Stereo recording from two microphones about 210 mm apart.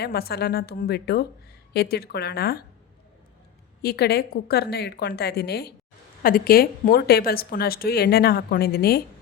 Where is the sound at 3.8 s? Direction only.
50° left (ahead or behind).